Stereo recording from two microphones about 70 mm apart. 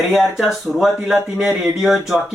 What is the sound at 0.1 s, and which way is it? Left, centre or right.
Speech, centre.